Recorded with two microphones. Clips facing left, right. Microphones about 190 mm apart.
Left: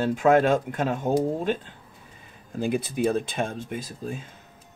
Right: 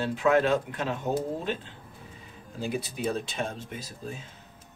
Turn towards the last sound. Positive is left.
turn(degrees=50)  # may be behind; listen again after turning